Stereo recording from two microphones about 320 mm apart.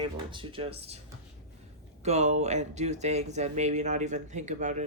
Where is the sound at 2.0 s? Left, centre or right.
Right.